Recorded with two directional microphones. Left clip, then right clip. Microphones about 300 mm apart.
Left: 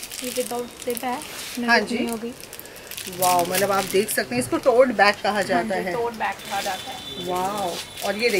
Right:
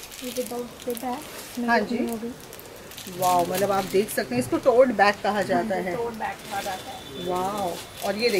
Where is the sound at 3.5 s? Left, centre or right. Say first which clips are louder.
Left 2 dB; centre.